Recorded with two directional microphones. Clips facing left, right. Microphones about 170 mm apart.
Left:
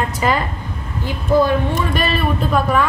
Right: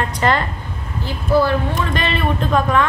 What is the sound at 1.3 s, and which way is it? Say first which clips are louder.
Speech: left 1 dB; 20° left (ahead or behind).